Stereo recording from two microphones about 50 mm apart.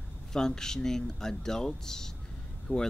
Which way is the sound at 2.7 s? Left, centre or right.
Left.